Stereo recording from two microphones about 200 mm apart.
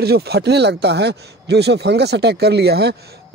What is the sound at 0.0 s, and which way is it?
Speech, 55° right (ahead or behind).